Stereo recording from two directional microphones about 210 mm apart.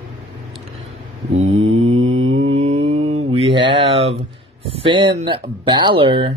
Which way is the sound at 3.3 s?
25° right (ahead or behind).